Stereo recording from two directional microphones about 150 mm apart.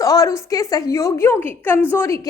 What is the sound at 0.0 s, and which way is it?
A woman's voice, 25° left (ahead or behind).